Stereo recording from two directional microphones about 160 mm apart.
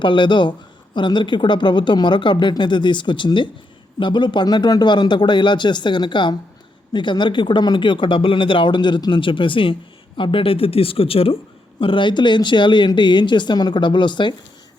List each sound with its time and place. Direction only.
0.0 s speech: 30° left (ahead or behind)